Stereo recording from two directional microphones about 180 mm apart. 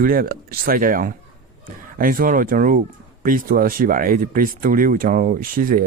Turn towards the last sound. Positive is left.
turn(degrees=-50)  # may be behind; listen again after turning